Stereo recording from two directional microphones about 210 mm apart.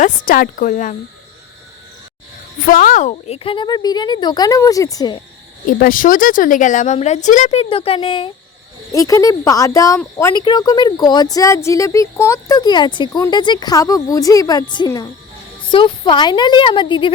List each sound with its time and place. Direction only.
0.0 s speech: 40° left (ahead or behind)
2.6 s a woman's voice: 40° left (ahead or behind); by 5.2 s 20° left (ahead or behind)
5.6 s a woman's voice: 40° left (ahead or behind); by 17.1 s 20° left (ahead or behind)